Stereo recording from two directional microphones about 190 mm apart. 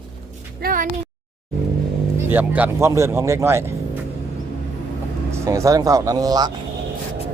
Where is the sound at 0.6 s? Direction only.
50° right (ahead or behind).